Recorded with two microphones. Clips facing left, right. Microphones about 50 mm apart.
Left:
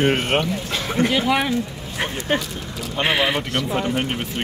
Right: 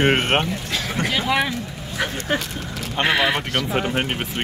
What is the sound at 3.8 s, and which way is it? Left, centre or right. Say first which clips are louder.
Speech: even; right.